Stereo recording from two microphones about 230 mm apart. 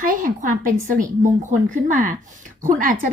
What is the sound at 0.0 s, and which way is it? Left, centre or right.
A woman's voice, right.